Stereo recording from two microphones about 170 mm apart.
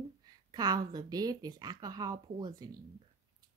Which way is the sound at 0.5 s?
25° right (ahead or behind).